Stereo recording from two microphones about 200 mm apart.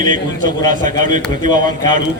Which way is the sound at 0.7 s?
40° right (ahead or behind).